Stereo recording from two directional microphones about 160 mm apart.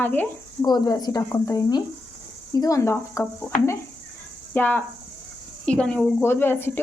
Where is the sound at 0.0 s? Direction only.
10° left (ahead or behind).